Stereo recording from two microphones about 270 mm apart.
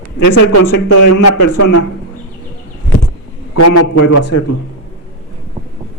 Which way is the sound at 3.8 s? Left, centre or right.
Left.